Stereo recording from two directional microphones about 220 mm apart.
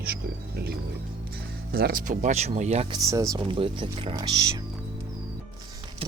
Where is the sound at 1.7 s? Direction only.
40° right (ahead or behind).